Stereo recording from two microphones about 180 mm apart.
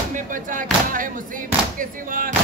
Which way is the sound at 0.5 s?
50° right (ahead or behind).